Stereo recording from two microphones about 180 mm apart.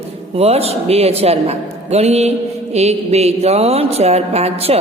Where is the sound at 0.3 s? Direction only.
35° right (ahead or behind).